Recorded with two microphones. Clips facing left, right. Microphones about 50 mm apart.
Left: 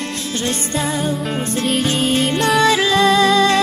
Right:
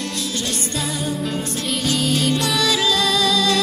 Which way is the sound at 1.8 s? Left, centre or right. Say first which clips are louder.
Even; left.